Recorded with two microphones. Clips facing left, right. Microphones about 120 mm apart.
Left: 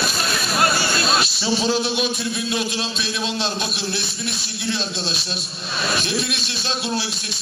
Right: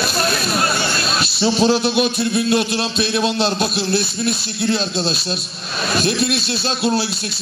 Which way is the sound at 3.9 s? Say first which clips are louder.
Right 8 dB; 40° right (ahead or behind).